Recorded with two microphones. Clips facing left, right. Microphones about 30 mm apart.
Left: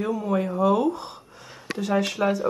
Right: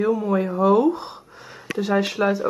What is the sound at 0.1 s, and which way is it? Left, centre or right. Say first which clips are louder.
Speech: right 3 dB; centre.